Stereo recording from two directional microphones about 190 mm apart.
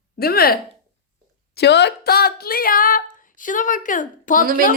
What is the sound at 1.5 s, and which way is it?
Female singing, 60° left (ahead or behind).